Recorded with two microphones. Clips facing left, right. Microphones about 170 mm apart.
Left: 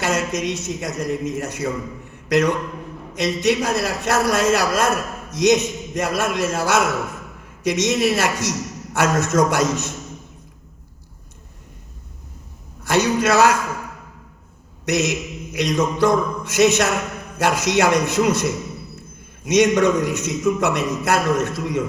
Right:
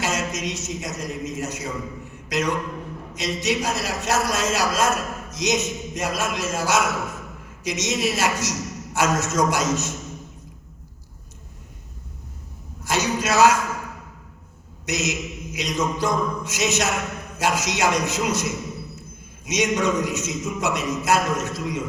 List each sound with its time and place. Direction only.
0.0 s a man's voice: 60° left (ahead or behind)
12.8 s a man's voice: 60° left (ahead or behind)
14.8 s a man's voice: 60° left (ahead or behind)